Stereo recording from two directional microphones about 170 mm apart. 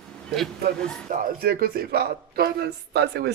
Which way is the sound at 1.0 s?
55° right (ahead or behind).